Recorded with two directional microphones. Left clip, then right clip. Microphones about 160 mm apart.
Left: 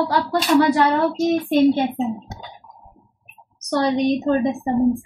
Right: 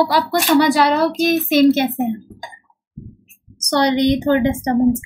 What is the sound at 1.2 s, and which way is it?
Speech, 25° right (ahead or behind).